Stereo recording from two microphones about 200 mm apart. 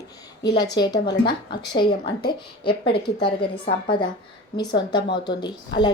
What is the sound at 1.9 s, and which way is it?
Speech, 50° left (ahead or behind).